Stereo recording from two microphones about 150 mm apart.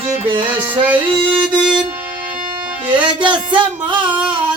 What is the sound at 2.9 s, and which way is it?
Speech, 30° right (ahead or behind).